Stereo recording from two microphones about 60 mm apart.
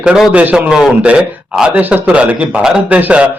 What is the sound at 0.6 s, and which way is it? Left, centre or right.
Speech, centre.